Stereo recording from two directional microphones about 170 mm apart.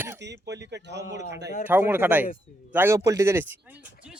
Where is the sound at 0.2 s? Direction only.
90° right.